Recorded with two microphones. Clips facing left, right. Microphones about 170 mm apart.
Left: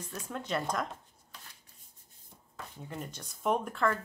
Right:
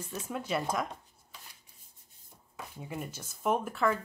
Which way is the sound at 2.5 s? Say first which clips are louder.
Right 2 dB; 10° right (ahead or behind).